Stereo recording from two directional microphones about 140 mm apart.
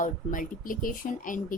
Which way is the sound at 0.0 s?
70° left (ahead or behind).